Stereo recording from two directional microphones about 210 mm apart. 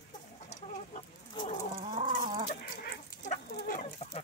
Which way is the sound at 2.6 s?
45° left (ahead or behind).